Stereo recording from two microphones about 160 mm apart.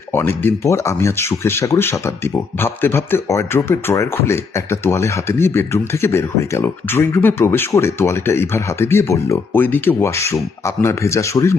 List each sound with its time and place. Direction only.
0.1 s speech: 15° left (ahead or behind)